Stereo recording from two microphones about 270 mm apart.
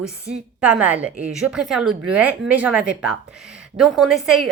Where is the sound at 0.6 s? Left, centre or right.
Centre.